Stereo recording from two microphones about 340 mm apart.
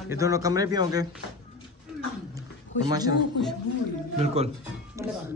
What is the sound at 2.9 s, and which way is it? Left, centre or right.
Speech, centre.